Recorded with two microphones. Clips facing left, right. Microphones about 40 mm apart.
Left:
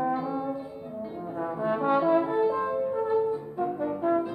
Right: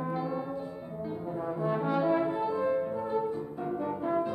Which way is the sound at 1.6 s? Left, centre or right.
Left.